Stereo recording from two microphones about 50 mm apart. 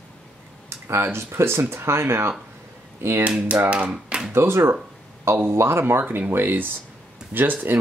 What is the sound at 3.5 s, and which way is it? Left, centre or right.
Speech, right.